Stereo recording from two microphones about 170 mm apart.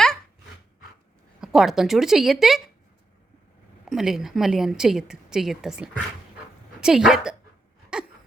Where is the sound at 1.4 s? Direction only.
Centre (ahead or behind).